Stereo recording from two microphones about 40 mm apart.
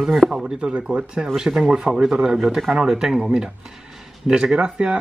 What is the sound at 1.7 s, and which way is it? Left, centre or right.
Speech, centre.